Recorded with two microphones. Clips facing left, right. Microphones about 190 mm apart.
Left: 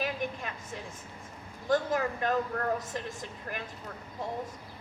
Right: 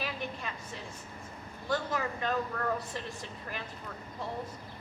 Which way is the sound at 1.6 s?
50° left (ahead or behind).